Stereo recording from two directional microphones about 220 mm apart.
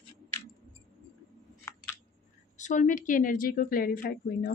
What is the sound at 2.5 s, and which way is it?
Speech, 35° left (ahead or behind).